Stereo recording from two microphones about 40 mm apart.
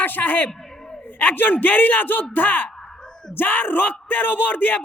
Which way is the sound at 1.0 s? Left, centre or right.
Left.